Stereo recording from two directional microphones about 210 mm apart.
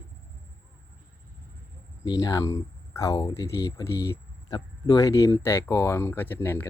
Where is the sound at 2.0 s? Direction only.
20° left (ahead or behind).